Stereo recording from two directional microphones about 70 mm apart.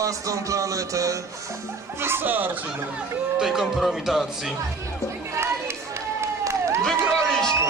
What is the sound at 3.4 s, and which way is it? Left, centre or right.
Music, centre.